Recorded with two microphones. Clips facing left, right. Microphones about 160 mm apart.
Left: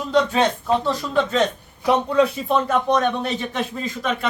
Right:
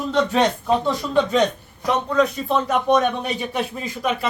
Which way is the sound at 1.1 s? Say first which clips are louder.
Right 2 dB; centre (ahead or behind).